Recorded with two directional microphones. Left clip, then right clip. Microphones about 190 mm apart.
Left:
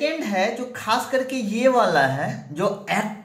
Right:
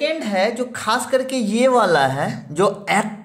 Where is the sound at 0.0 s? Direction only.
35° right (ahead or behind).